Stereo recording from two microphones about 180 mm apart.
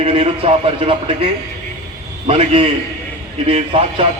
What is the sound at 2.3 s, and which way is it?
A man's voice, 30° right (ahead or behind).